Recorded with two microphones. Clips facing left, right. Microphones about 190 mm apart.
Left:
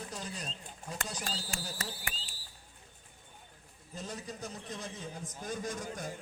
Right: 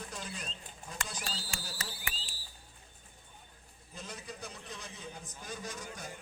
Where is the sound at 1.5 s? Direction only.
50° left (ahead or behind).